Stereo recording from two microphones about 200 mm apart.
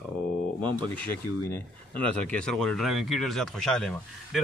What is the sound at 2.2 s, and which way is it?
Speech, 5° left (ahead or behind).